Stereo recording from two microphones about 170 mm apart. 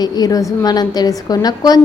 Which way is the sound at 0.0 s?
20° left (ahead or behind).